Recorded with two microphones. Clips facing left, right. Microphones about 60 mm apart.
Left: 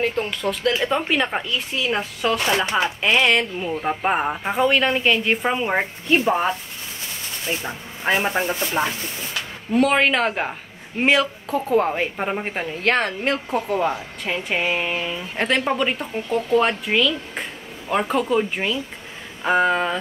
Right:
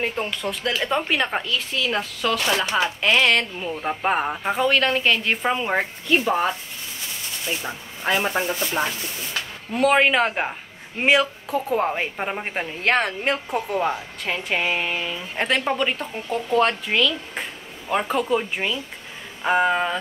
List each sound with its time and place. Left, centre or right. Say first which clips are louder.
0.8 s a woman's voice: left 1 dB; centre
1.5 s speech: left 1 dB; centre
3.0 s a woman's voice: left 1 dB; centre
7.6 s a woman's voice: left 2 dB; centre
9.7 s a woman's voice: even; centre
14.2 s a woman's voice: left 1 dB; centre